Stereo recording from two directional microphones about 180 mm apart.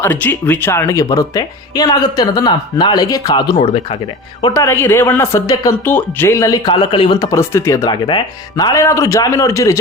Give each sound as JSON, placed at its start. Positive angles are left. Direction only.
{"t": 0.0, "sound": "speech", "side_deg": 10}
{"t": 4.4, "sound": "speech", "side_deg": 15}